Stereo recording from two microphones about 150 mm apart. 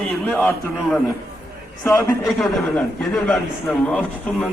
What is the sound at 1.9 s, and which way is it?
Speech, 20° left (ahead or behind).